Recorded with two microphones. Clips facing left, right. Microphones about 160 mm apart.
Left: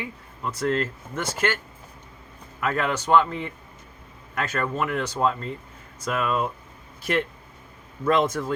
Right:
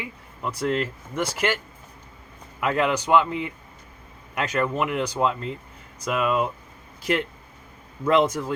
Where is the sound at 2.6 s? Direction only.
15° right (ahead or behind).